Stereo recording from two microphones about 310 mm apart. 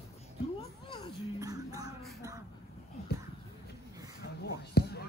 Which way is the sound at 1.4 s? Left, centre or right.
Centre.